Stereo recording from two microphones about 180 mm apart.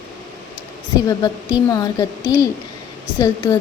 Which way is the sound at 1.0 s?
20° left (ahead or behind).